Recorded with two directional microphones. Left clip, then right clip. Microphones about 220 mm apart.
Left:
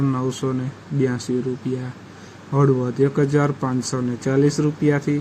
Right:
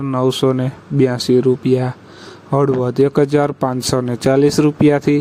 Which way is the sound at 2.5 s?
35° right (ahead or behind).